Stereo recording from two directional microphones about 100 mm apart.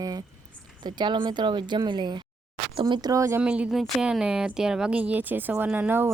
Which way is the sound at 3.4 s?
10° right (ahead or behind).